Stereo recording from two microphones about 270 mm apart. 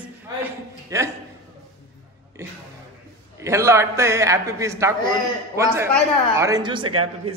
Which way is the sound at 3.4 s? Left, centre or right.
Centre.